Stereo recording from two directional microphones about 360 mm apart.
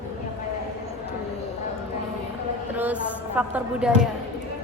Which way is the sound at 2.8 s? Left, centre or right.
Centre.